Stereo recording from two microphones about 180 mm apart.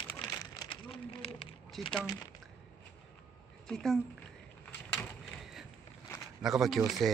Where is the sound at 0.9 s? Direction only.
30° left (ahead or behind).